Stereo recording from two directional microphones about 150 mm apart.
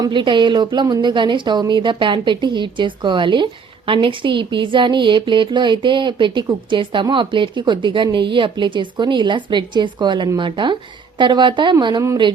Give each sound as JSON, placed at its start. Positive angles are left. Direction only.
{"t": 0.0, "sound": "a woman's voice", "side_deg": -30}